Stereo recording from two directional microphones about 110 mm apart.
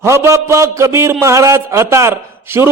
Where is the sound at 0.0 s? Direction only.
25° right (ahead or behind).